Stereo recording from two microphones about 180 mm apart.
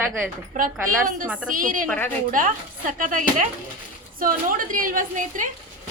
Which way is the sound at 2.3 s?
50° right (ahead or behind).